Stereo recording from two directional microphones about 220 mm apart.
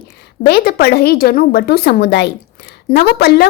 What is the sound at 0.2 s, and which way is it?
A woman's voice, 45° left (ahead or behind).